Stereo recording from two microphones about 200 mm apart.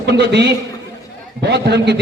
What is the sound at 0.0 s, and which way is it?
A man's voice, 55° right (ahead or behind).